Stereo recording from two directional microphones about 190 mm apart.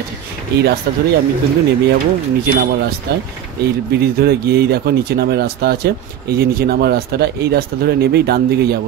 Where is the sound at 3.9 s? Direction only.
55° right (ahead or behind).